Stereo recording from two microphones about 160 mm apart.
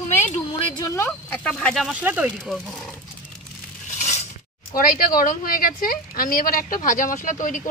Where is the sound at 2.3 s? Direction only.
Centre (ahead or behind).